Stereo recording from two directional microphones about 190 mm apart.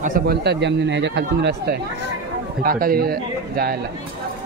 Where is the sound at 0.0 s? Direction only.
50° right (ahead or behind).